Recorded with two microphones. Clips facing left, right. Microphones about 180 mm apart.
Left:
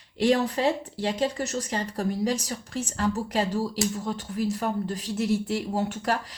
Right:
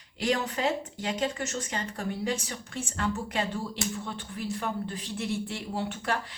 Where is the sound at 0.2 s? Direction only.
35° left (ahead or behind).